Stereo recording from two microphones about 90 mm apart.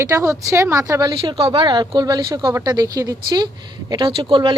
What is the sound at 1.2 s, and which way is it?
Speech, 90° right.